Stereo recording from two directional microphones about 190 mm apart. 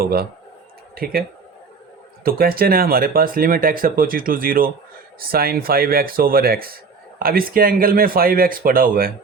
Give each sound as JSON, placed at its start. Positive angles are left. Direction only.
{"t": 0.0, "sound": "speech", "side_deg": -55}
{"t": 2.2, "sound": "speech", "side_deg": -50}